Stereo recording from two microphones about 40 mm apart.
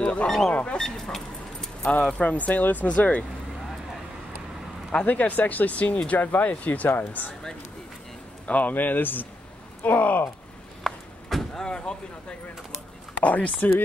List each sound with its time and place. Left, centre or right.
0.0 s a sound: left
0.5 s speech: left
0.7 s keys jangling: centre
2.1 s speech: left
2.6 s speech: left
2.9 s speech: left
5.0 s speech: left
6.9 s speech: left
8.5 s speech: left
10.8 s a sound: centre
11.5 s speech: left
13.2 s speech: left
13.6 s speech: left